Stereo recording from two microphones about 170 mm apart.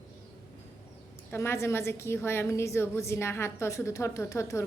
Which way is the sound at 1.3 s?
15° left (ahead or behind).